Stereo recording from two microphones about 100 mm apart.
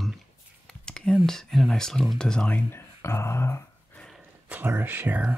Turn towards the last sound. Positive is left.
turn(degrees=-15)  # may be behind; listen again after turning